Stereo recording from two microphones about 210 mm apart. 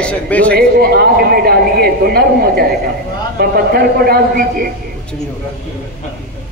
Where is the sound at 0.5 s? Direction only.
50° right (ahead or behind).